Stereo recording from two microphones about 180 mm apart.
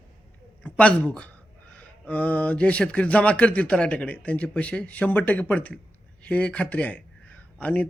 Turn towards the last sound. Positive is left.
turn(degrees=10)  # may be behind; listen again after turning